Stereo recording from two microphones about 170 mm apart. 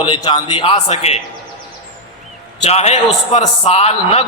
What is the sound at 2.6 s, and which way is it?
A man's voice, 35° left (ahead or behind).